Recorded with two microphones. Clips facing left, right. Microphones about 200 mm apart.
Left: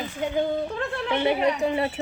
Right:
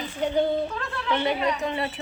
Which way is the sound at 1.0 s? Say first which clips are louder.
Left 2 dB; 15° left (ahead or behind).